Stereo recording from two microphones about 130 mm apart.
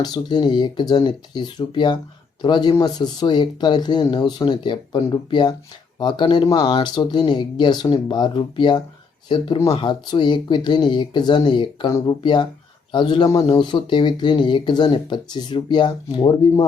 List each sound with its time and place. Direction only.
0.0 s speech: 35° left (ahead or behind)